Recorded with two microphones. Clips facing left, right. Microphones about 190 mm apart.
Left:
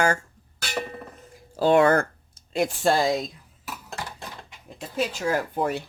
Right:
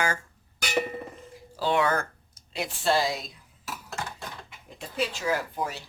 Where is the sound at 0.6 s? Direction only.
15° right (ahead or behind).